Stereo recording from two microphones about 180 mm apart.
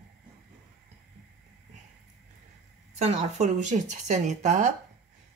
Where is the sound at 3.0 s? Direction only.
40° right (ahead or behind).